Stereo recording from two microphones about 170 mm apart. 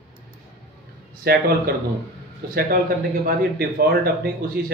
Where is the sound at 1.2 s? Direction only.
70° right (ahead or behind).